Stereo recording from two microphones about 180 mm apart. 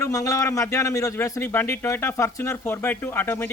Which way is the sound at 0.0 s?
20° left (ahead or behind).